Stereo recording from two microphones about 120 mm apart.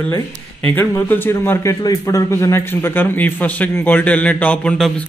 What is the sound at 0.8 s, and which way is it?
A man's voice, 20° left (ahead or behind).